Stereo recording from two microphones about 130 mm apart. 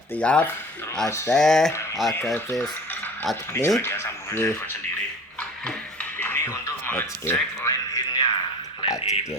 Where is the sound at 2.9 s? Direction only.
15° left (ahead or behind).